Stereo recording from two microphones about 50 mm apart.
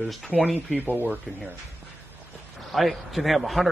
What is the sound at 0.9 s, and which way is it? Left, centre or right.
Speech, right.